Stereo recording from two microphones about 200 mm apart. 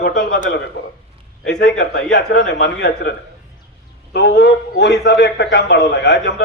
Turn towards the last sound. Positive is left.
turn(degrees=60)  # may be behind; listen again after turning